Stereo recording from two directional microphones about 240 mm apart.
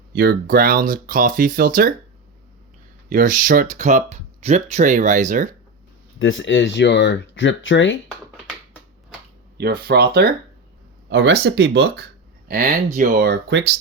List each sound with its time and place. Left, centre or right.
0.1 s speech: right
3.1 s speech: right
6.1 s speech: left
9.6 s speech: right